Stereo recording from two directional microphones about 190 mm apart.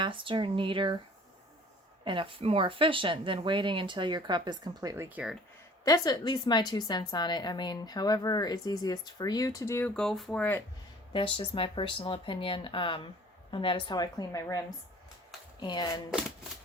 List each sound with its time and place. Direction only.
0.0 s speech: 25° right (ahead or behind)
2.0 s speech: 25° right (ahead or behind); by 5.4 s 5° right (ahead or behind)
5.8 s a woman's voice: 20° left (ahead or behind)
11.1 s a woman's voice: 25° left (ahead or behind)
15.6 s a woman's voice: 20° left (ahead or behind)